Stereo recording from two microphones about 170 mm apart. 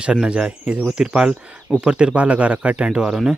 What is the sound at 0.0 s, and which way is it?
Speech, 5° right (ahead or behind).